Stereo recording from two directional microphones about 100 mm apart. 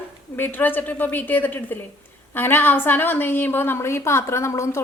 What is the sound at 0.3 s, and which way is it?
A woman's voice, 20° left (ahead or behind).